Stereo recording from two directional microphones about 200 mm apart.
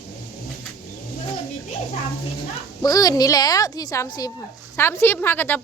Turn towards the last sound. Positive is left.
turn(degrees=10)  # may be behind; listen again after turning